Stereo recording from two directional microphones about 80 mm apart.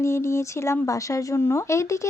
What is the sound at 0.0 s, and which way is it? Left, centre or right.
Speech, left.